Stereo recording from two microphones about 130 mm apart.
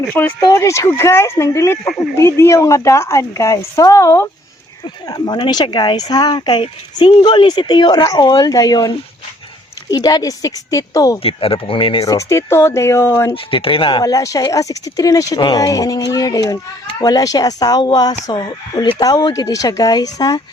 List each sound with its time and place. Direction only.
0.2 s a woman's voice: 15° left (ahead or behind)
11.2 s speech: 45° left (ahead or behind)
12.0 s a woman's voice: 25° left (ahead or behind)
13.3 s speech: 45° left (ahead or behind)
14.0 s a woman's voice: 25° left (ahead or behind)